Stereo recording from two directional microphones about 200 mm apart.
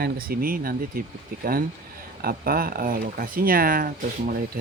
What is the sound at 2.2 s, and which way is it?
Speech, 50° right (ahead or behind).